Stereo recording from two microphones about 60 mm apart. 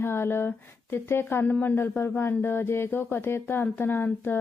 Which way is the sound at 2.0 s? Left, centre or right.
Left.